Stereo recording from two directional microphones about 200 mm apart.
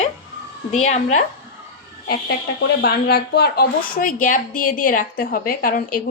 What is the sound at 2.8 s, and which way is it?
A woman's voice, 50° left (ahead or behind).